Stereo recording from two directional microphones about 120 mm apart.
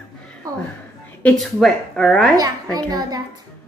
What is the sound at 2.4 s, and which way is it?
Speech, 30° right (ahead or behind).